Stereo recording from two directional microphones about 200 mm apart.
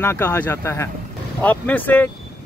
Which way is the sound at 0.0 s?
10° left (ahead or behind).